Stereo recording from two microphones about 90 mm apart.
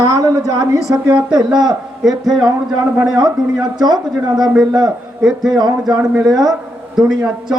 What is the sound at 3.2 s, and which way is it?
Speech, 50° right (ahead or behind).